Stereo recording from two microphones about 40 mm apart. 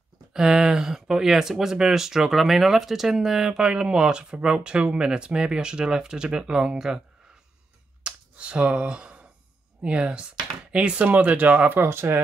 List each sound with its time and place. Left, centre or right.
0.3 s speech: centre
8.0 s finger snapping: right
9.8 s speech: right
11.0 s speech: right
11.8 s speech: right